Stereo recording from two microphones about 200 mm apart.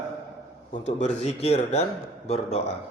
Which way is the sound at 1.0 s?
35° left (ahead or behind).